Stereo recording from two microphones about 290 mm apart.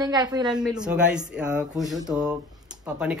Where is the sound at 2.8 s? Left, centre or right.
Centre.